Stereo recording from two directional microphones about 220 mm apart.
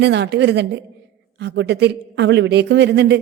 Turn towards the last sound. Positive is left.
turn(degrees=-50)  # may be behind; listen again after turning